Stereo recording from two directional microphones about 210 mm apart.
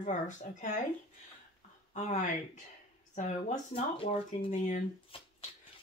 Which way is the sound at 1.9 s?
35° left (ahead or behind).